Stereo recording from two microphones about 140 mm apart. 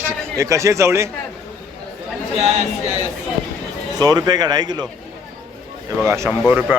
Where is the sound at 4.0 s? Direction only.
30° right (ahead or behind).